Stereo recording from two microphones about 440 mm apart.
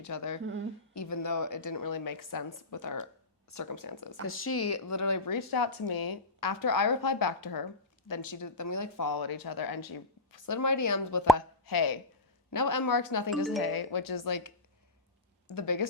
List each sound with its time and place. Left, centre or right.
0.0 s a woman's voice: left
4.3 s a woman's voice: left
15.5 s speech: left